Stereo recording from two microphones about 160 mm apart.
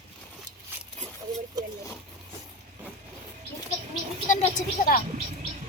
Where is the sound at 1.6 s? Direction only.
25° right (ahead or behind).